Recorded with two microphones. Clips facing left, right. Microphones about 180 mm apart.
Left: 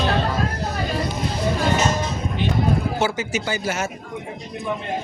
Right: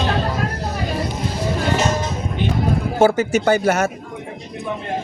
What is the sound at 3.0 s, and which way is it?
Speech, 55° right (ahead or behind).